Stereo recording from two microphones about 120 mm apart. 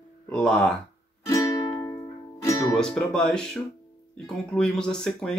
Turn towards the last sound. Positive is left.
turn(degrees=5)  # may be behind; listen again after turning